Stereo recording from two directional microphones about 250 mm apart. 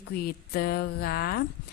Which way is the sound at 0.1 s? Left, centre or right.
Left.